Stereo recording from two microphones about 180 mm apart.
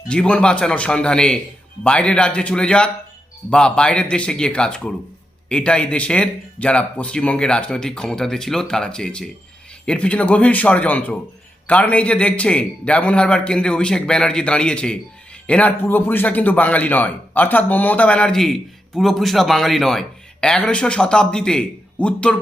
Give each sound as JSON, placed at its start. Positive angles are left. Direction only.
{"t": 0.1, "sound": "a man's voice", "side_deg": 5}